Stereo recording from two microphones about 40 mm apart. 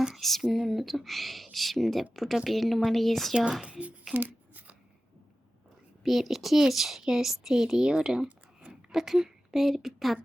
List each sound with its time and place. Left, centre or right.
0.2 s speech: centre
0.4 s a woman's voice: centre
3.6 s speech: right
4.1 s a sound: right
6.0 s a woman's voice: centre